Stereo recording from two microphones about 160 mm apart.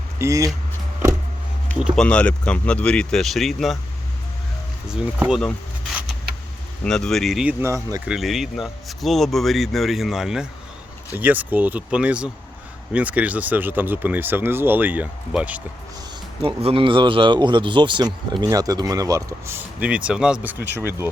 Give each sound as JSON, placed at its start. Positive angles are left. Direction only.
{"t": 0.2, "sound": "speech", "side_deg": -20}
{"t": 2.0, "sound": "speech", "side_deg": 5}
{"t": 4.9, "sound": "a man's voice", "side_deg": -5}
{"t": 5.9, "sound": "a sound", "side_deg": -5}
{"t": 6.8, "sound": "a man's voice", "side_deg": 5}
{"t": 7.6, "sound": "speech", "side_deg": -20}
{"t": 8.0, "sound": "a man's voice", "side_deg": 0}
{"t": 16.4, "sound": "speech", "side_deg": -35}